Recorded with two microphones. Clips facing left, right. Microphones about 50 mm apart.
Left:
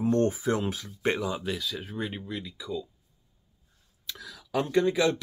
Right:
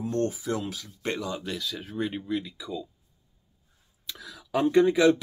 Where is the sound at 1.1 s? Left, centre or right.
Centre.